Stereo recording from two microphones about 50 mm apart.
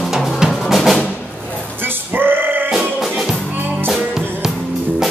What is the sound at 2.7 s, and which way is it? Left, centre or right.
Music, centre.